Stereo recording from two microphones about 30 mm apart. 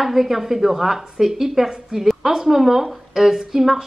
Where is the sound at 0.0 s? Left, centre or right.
Centre.